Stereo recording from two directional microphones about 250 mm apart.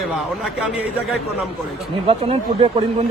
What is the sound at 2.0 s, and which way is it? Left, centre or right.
Speech, right.